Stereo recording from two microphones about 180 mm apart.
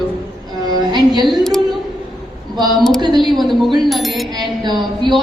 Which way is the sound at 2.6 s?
Centre (ahead or behind).